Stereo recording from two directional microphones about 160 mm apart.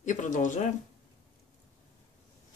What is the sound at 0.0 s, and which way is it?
Speech, 50° left (ahead or behind).